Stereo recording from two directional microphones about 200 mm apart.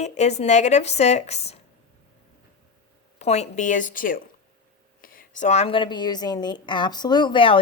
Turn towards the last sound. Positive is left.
turn(degrees=25)  # may be behind; listen again after turning